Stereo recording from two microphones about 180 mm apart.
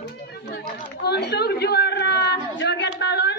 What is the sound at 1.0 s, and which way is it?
A man's voice, 65° left (ahead or behind).